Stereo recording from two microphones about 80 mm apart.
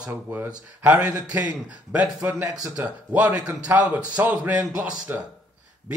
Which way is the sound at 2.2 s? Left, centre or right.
Right.